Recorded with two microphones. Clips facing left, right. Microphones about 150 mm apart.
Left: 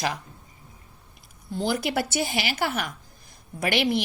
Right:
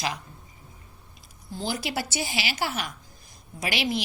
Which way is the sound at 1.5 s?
60° left (ahead or behind).